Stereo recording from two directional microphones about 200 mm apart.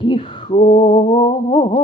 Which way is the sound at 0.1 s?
25° left (ahead or behind).